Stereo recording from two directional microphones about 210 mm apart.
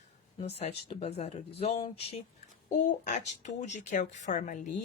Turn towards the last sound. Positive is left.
turn(degrees=35)  # may be behind; listen again after turning